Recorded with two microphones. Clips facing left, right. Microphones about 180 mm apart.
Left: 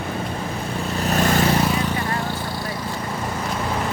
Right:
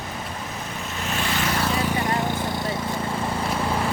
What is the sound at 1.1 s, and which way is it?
Vehicle, 45° left (ahead or behind).